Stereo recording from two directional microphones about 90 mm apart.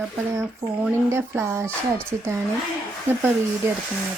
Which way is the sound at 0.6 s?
30° right (ahead or behind).